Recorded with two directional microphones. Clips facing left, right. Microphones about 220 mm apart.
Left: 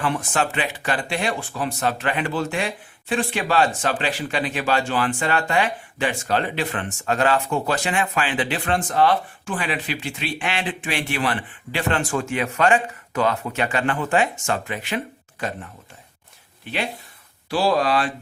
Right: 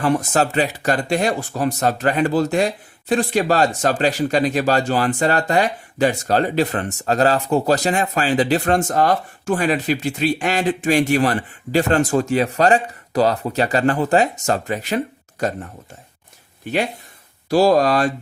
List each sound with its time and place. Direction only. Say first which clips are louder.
0.0 s speech: right 5 dB; 40° right (ahead or behind)
17.5 s speech: right 6 dB; 40° right (ahead or behind)